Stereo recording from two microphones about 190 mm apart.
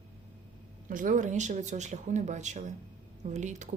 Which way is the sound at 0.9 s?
45° right (ahead or behind).